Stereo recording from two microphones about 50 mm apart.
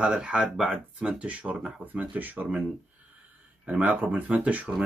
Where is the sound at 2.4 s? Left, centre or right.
Centre.